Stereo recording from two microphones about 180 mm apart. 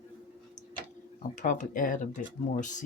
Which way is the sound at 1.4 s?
45° left (ahead or behind).